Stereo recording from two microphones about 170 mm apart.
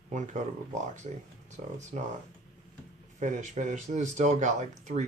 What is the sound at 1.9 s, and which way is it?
Speech, 45° right (ahead or behind).